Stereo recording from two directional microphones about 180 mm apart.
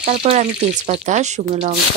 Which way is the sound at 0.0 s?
35° right (ahead or behind).